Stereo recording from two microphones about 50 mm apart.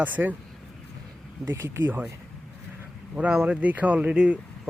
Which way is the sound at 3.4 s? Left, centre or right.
Right.